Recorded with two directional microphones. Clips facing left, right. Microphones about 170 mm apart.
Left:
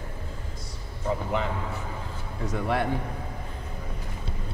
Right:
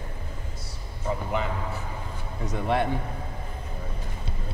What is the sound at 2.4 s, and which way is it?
Speech, 20° right (ahead or behind).